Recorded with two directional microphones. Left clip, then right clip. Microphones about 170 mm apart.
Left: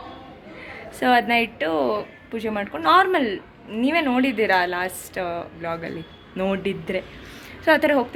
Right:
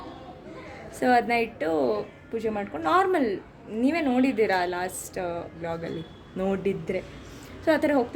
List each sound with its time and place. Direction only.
0.9 s a woman's voice: 5° right (ahead or behind)